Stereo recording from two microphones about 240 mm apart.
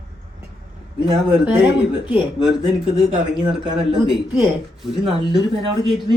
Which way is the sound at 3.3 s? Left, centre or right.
Centre.